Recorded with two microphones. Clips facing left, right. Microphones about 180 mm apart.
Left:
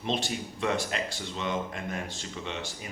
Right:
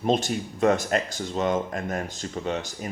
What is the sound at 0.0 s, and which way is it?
Speech, 45° right (ahead or behind).